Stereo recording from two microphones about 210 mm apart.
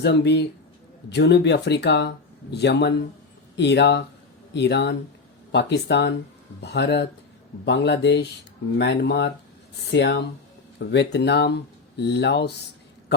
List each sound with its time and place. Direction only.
0.0 s speech: 55° left (ahead or behind)